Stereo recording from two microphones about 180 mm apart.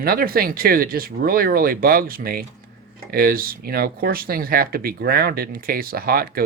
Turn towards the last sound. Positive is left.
turn(degrees=-55)  # may be behind; listen again after turning